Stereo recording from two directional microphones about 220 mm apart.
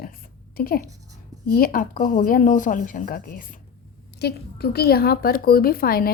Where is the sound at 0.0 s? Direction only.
45° left (ahead or behind).